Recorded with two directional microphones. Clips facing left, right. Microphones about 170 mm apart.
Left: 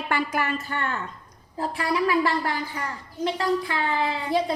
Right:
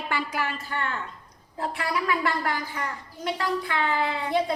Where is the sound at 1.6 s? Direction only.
30° left (ahead or behind).